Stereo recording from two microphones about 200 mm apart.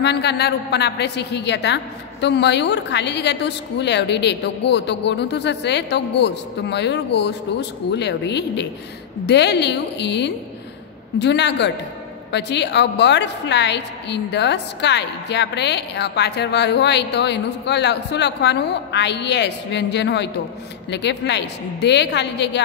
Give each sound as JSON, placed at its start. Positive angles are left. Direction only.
{"t": 0.0, "sound": "a woman's voice", "side_deg": 55}